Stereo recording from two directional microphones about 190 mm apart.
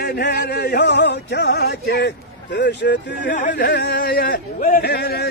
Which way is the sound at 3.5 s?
60° left (ahead or behind).